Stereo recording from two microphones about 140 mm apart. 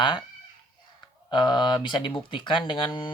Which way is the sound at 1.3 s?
35° left (ahead or behind).